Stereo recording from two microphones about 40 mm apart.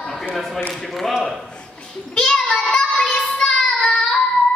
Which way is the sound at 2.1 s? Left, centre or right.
Left.